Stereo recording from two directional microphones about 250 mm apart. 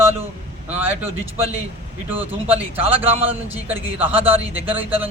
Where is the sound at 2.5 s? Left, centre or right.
Right.